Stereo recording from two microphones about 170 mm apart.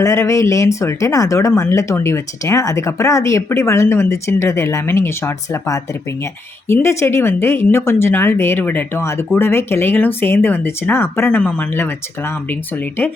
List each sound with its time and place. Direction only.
0.0 s speech: 15° left (ahead or behind)